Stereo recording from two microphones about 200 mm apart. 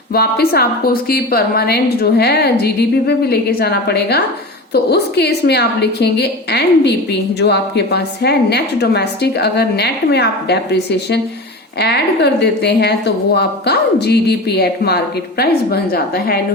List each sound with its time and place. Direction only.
0.1 s a woman's voice: 50° left (ahead or behind)